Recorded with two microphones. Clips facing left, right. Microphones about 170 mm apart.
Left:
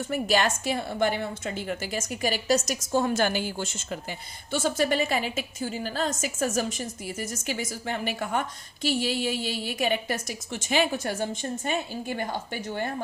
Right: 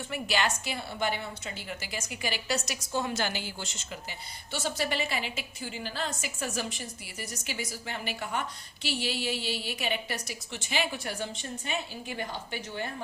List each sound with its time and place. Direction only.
0.0 s a woman's voice: 45° left (ahead or behind)